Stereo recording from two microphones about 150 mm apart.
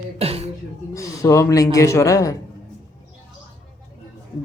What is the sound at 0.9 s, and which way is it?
A man's voice, 20° left (ahead or behind).